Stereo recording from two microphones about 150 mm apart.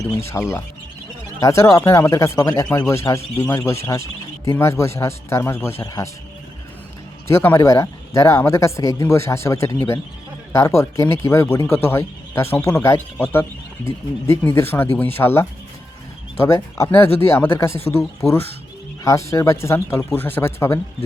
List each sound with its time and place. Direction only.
0.0 s speech: 20° left (ahead or behind)
7.3 s speech: 15° left (ahead or behind)